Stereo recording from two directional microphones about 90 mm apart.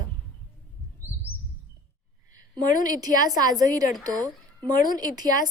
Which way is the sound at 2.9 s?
45° right (ahead or behind).